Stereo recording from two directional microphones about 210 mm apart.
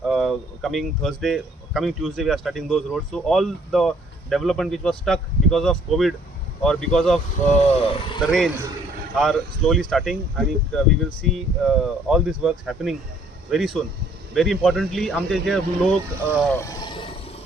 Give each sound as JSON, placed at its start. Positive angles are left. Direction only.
{"t": 0.1, "sound": "speech", "side_deg": 0}
{"t": 7.6, "sound": "speech", "side_deg": 30}
{"t": 9.1, "sound": "speech", "side_deg": 0}
{"t": 16.5, "sound": "speech", "side_deg": 15}